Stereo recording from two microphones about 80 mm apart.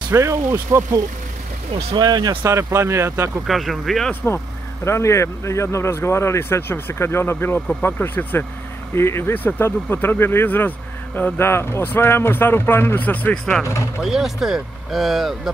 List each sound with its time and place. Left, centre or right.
0.1 s speech: right
2.0 s speech: right
2.4 s speech: right
3.4 s speech: centre
4.1 s speech: left
4.8 s speech: left; by 13.7 s centre
14.0 s speech: centre